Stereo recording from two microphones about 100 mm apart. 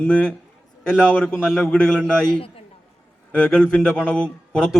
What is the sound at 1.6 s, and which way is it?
Speech, 10° left (ahead or behind).